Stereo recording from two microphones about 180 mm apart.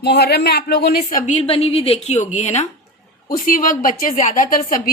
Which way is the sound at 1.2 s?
35° left (ahead or behind).